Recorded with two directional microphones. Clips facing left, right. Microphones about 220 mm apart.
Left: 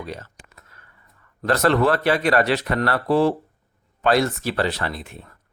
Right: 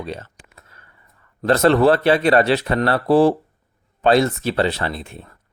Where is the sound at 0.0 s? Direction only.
25° right (ahead or behind).